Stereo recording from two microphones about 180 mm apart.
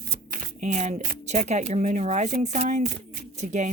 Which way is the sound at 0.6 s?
40° right (ahead or behind).